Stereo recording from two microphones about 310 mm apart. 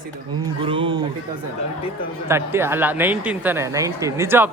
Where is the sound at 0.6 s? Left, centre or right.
Centre.